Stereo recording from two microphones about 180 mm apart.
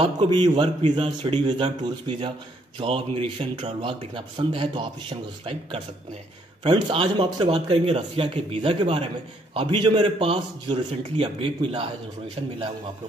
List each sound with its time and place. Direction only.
0.0 s a man's voice: 30° right (ahead or behind)